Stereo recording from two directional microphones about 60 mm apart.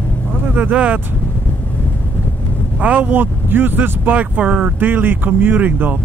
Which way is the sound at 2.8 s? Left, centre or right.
Right.